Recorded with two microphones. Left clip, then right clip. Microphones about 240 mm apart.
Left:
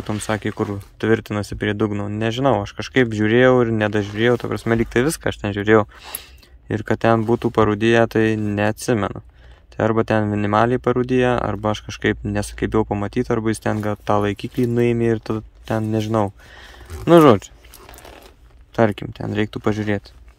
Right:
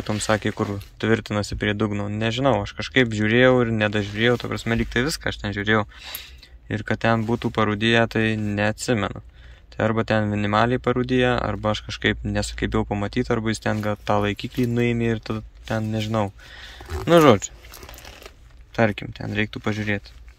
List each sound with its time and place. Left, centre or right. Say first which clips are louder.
0.0 s speech: right 1 dB; centre
18.8 s speech: left 3 dB; left